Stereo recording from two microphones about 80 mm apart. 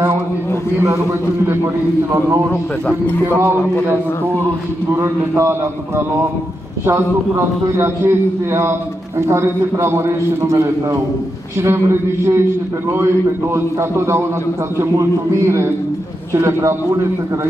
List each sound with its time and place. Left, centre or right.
1.4 s a man's voice: right
4.9 s a man's voice: right